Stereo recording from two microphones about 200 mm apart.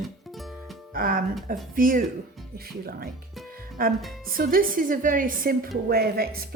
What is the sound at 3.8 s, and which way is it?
A woman's voice, 45° right (ahead or behind).